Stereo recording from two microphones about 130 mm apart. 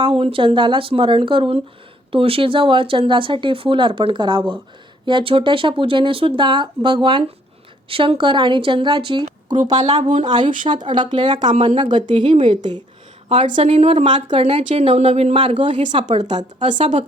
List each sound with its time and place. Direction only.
0.0 s speech: 45° right (ahead or behind)
11.5 s speech: 45° right (ahead or behind)
13.2 s speech: 45° right (ahead or behind)
14.7 s speech: 60° right (ahead or behind); by 16.0 s 40° right (ahead or behind)
16.0 s a woman's voice: 60° right (ahead or behind)
16.6 s speech: 40° right (ahead or behind)